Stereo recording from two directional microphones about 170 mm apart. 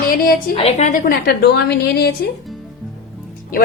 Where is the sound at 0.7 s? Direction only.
45° left (ahead or behind).